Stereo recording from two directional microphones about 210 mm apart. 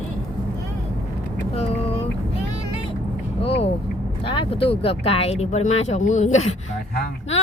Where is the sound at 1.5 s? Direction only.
30° left (ahead or behind).